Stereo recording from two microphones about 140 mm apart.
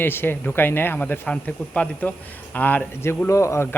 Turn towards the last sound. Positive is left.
turn(degrees=20)  # may be behind; listen again after turning